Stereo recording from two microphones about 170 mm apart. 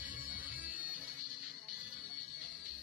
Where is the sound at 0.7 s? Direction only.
55° left (ahead or behind).